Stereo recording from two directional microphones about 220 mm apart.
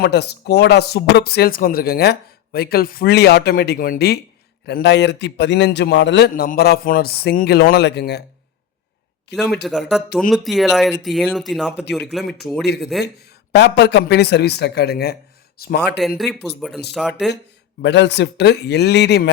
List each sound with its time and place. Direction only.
0.0 s speech: 50° left (ahead or behind)
9.3 s speech: centre (ahead or behind)
12.6 s speech: 50° left (ahead or behind)
16.0 s speech: centre (ahead or behind)
17.8 s speech: 50° left (ahead or behind)